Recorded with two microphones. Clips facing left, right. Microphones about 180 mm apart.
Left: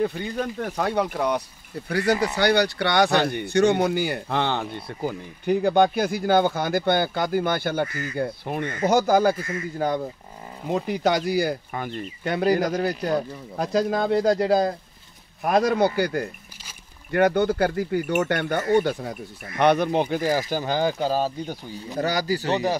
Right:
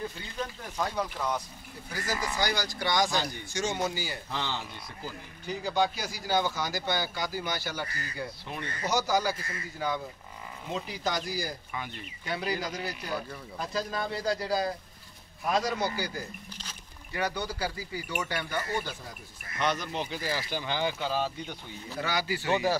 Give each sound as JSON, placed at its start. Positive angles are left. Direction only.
{"t": 0.0, "sound": "speech", "side_deg": 65}
{"t": 10.7, "sound": "speech", "side_deg": 60}
{"t": 13.6, "sound": "speech", "side_deg": 80}